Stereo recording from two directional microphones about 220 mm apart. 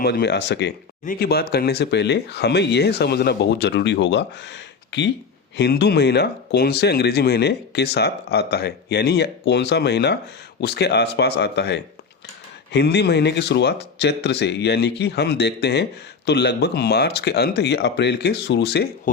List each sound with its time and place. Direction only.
0.0 s speech: 50° left (ahead or behind)